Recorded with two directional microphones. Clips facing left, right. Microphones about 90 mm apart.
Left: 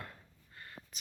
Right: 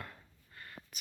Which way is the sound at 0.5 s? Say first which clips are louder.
Even; 25° left (ahead or behind).